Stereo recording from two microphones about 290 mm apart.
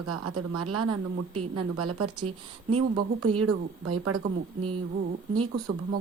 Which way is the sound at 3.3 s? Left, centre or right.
Right.